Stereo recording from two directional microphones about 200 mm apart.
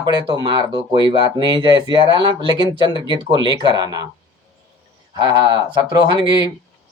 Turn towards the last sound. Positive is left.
turn(degrees=-20)  # may be behind; listen again after turning